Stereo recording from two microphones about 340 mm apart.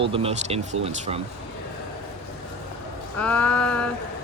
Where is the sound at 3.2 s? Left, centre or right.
Centre.